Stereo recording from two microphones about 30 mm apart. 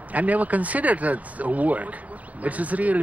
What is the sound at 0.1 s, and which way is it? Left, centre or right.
Speech, right.